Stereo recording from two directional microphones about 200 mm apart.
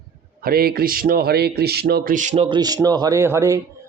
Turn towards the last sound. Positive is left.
turn(degrees=-15)  # may be behind; listen again after turning